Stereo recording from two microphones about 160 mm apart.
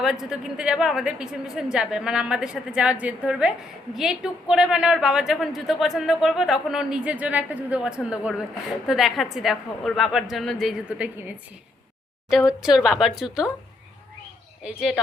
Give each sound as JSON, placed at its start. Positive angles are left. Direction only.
{"t": 0.0, "sound": "a woman's voice", "side_deg": -5}
{"t": 12.5, "sound": "a woman's voice", "side_deg": -5}
{"t": 14.6, "sound": "a woman's voice", "side_deg": -5}